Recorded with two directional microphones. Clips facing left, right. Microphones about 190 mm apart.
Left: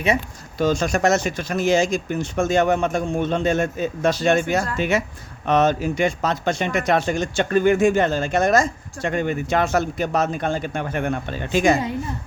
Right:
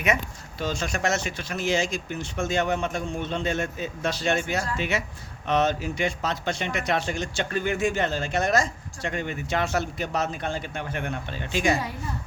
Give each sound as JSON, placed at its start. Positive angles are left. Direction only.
{"t": 0.6, "sound": "speech", "side_deg": 45}